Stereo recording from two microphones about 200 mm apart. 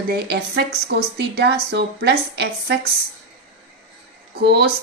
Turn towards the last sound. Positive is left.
turn(degrees=-55)  # may be behind; listen again after turning